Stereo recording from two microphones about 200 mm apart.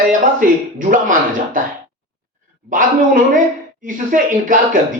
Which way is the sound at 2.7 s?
40° right (ahead or behind).